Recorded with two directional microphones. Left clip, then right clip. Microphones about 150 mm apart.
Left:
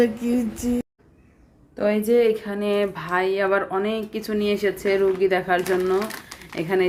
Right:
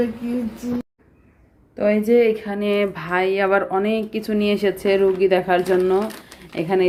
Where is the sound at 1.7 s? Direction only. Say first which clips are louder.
Right 3 dB; centre (ahead or behind).